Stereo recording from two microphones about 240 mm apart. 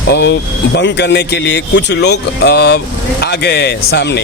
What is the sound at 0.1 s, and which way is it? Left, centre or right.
Speech, left.